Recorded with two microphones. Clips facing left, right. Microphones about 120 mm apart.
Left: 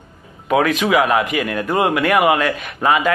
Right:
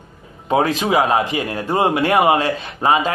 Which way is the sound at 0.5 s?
30° right (ahead or behind).